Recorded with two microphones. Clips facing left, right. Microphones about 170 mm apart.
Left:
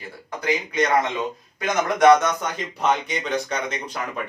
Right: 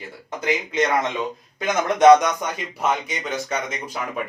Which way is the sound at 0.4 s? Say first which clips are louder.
Right 1 dB; 20° right (ahead or behind).